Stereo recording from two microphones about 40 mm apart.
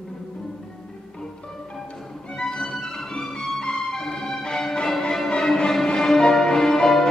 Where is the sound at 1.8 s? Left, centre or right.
Centre.